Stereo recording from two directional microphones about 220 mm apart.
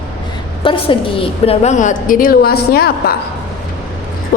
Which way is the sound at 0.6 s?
25° left (ahead or behind).